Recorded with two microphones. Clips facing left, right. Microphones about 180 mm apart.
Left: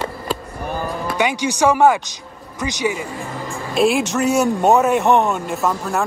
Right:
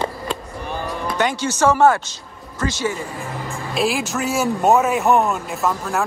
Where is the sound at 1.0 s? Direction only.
10° left (ahead or behind).